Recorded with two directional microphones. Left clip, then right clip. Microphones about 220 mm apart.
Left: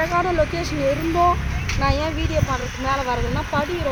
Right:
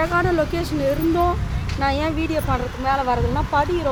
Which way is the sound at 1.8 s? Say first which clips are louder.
Right 2 dB; 45° right (ahead or behind).